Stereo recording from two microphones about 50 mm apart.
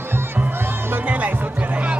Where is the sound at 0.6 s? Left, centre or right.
Right.